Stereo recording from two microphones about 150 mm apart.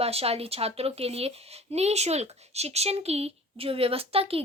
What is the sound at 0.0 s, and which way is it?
Speech, 40° right (ahead or behind).